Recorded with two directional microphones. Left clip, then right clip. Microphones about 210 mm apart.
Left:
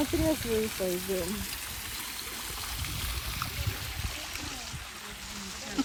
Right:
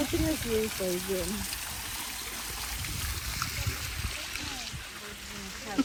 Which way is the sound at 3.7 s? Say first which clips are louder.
Right 1 dB; 50° left (ahead or behind).